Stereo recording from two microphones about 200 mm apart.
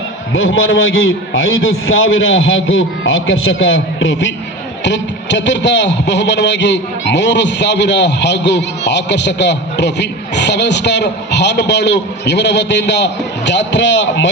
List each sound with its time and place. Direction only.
0.3 s a man's voice: 75° left (ahead or behind)